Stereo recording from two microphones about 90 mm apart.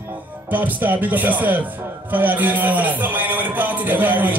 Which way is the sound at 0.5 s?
20° right (ahead or behind).